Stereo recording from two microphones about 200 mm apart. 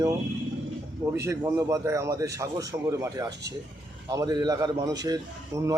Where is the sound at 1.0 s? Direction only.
15° right (ahead or behind).